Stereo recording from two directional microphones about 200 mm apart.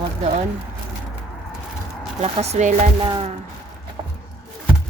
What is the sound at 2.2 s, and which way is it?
A woman's voice, 30° right (ahead or behind).